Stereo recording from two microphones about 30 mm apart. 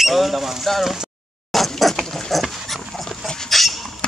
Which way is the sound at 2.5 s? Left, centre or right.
Centre.